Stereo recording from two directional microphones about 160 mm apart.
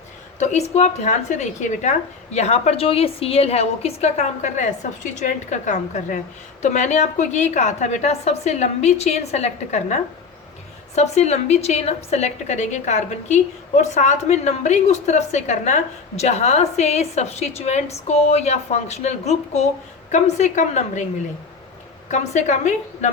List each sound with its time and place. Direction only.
0.3 s a woman's voice: 45° left (ahead or behind)
22.1 s a woman's voice: 45° left (ahead or behind)